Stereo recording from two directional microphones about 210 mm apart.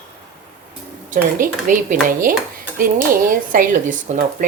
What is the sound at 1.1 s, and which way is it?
A woman's voice, 40° right (ahead or behind).